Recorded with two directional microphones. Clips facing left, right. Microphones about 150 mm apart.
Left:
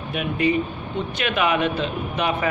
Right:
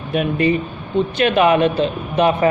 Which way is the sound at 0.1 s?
35° right (ahead or behind).